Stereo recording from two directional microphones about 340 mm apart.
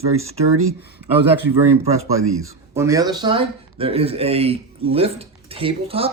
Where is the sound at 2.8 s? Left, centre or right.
Centre.